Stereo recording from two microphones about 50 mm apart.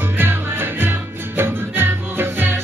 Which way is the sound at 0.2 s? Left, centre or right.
Right.